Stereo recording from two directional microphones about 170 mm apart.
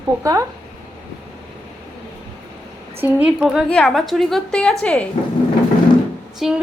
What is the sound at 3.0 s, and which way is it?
A woman's voice, 10° right (ahead or behind).